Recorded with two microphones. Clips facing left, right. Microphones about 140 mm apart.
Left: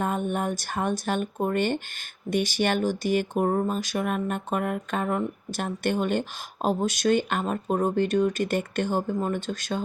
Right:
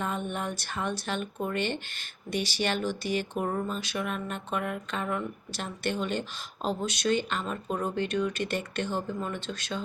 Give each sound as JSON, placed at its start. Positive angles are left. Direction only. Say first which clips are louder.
{"t": 0.0, "sound": "speech", "louder": "left 5 dB", "side_deg": 45}